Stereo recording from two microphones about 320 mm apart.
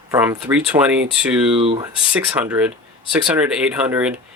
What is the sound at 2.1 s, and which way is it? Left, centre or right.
Speech, centre.